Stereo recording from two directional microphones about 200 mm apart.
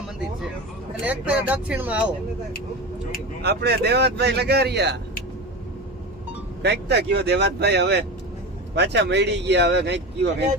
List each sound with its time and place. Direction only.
1.0 s speech: 10° right (ahead or behind)
3.4 s speech: 55° right (ahead or behind)
6.6 s speech: 55° right (ahead or behind)